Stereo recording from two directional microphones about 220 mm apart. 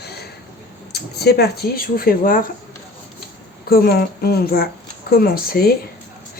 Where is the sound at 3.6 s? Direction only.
45° left (ahead or behind).